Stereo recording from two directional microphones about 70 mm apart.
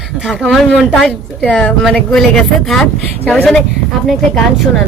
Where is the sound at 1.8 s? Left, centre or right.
Centre.